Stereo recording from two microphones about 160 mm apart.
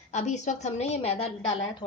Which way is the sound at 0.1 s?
45° left (ahead or behind).